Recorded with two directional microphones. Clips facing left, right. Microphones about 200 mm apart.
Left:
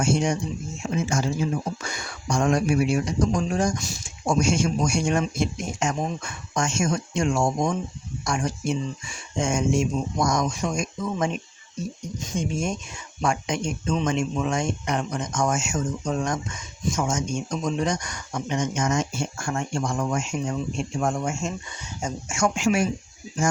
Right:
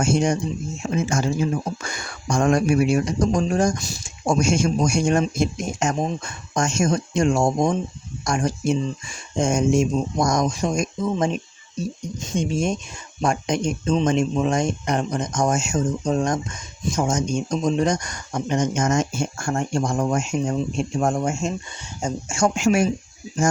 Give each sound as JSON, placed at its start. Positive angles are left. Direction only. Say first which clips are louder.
{"t": 0.0, "sound": "speech", "louder": "right 3 dB", "side_deg": -40}
{"t": 12.2, "sound": "speech", "louder": "right 4 dB", "side_deg": -30}